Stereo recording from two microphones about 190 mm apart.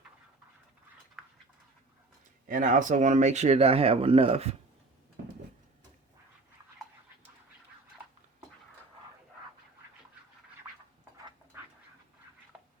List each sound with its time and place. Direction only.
1.2 s a sound: centre (ahead or behind)
2.5 s speech: 45° right (ahead or behind)
11.5 s duck: 10° right (ahead or behind)